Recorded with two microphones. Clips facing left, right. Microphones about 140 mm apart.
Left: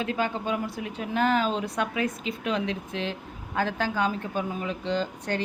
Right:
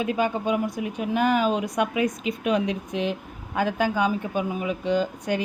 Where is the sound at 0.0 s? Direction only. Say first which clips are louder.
Right 4 dB; 15° right (ahead or behind).